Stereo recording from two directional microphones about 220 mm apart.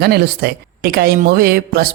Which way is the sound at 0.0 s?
45° right (ahead or behind).